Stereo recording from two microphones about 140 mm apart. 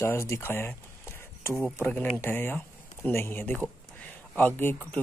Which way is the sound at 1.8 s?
10° left (ahead or behind).